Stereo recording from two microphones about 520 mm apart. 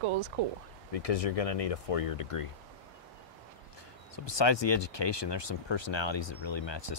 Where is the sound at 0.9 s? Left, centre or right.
Left.